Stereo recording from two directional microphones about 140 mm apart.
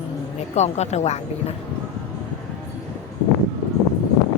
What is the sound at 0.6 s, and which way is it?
Speech, 55° left (ahead or behind).